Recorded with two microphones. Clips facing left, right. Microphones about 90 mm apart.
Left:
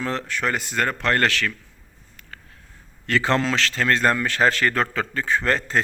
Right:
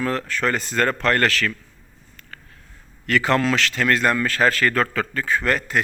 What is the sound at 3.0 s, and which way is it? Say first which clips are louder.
A man's voice: right 2 dB; 30° left (ahead or behind).